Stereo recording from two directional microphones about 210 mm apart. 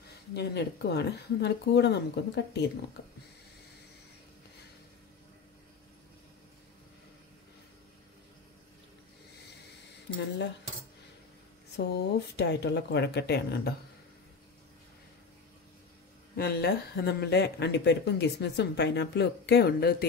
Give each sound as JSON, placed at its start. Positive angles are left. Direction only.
{"t": 0.3, "sound": "speech", "side_deg": 55}
{"t": 11.7, "sound": "speech", "side_deg": 50}
{"t": 16.3, "sound": "speech", "side_deg": 50}